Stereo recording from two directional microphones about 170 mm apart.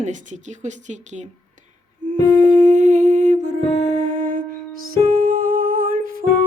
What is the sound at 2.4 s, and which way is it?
Humming, 50° right (ahead or behind).